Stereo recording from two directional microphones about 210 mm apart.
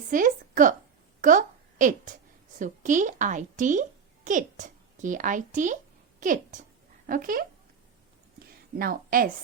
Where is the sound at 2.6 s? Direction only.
35° right (ahead or behind).